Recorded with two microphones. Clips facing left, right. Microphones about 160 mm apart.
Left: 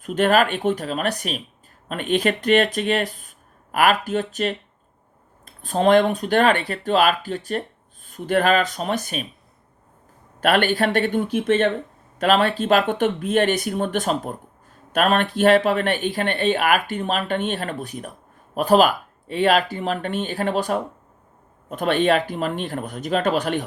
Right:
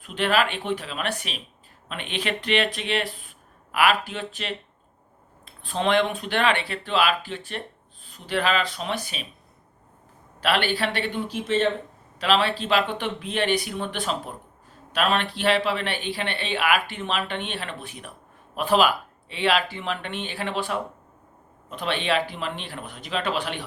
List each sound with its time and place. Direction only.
0.0 s speech: 45° left (ahead or behind)
10.4 s speech: 50° left (ahead or behind)